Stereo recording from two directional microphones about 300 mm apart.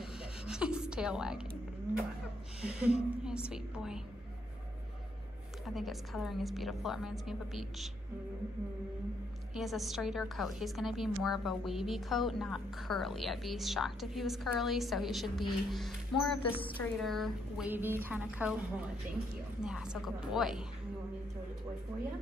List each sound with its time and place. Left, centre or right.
0.0 s a sound: centre
2.6 s a woman's voice: centre
5.8 s a woman's voice: centre
9.6 s a woman's voice: centre
16.4 s a woman's voice: centre
16.7 s a woman's voice: centre